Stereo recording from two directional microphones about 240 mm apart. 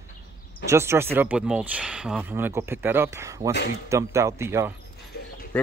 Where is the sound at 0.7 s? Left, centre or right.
Centre.